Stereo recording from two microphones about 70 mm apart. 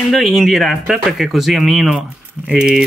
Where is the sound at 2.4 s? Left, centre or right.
Centre.